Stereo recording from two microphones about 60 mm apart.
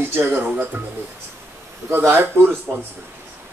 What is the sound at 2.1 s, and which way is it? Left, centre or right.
Speech, right.